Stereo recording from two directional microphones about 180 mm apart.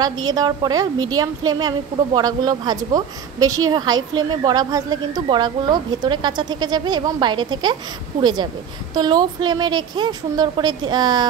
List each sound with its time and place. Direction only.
0.0 s a woman's voice: 20° right (ahead or behind)